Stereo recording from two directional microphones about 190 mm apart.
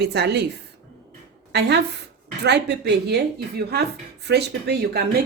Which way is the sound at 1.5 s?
60° right (ahead or behind).